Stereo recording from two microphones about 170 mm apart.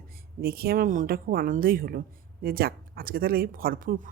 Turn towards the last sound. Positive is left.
turn(degrees=-55)  # may be behind; listen again after turning